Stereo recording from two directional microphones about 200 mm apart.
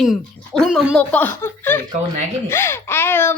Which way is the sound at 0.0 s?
Centre (ahead or behind).